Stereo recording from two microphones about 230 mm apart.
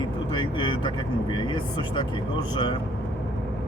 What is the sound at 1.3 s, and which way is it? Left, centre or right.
Speech, centre.